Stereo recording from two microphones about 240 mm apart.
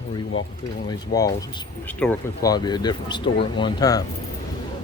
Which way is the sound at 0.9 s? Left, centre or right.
Centre.